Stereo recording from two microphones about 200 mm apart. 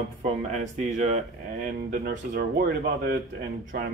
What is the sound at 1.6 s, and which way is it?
Speech, 50° right (ahead or behind).